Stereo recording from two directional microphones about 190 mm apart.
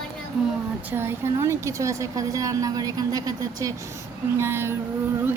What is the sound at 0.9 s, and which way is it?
Speech, 15° right (ahead or behind).